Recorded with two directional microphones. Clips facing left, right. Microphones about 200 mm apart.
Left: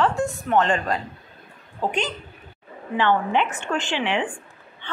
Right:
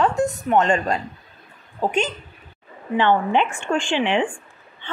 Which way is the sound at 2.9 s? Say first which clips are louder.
Right 3 dB; 20° right (ahead or behind).